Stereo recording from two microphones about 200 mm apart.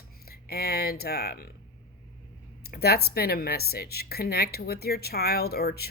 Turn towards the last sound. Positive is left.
turn(degrees=50)  # may be behind; listen again after turning